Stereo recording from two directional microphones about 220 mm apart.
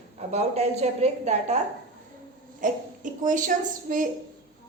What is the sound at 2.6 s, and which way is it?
A woman's voice, 35° right (ahead or behind).